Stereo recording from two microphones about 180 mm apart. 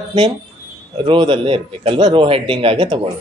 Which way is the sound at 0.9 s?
25° right (ahead or behind).